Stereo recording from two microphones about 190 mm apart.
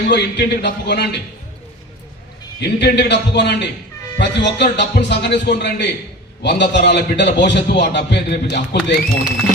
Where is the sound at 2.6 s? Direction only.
65° left (ahead or behind).